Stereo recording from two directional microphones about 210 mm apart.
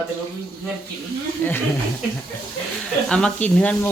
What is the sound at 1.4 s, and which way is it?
Speech, 10° left (ahead or behind).